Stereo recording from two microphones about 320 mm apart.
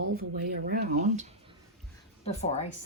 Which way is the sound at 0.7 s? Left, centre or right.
Right.